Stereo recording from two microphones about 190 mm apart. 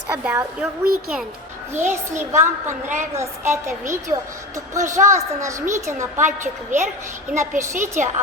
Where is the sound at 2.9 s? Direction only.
40° right (ahead or behind).